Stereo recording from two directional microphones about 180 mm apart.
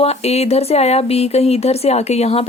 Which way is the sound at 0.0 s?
35° left (ahead or behind).